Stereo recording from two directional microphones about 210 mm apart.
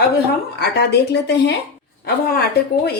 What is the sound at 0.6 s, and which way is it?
Speech, 50° left (ahead or behind).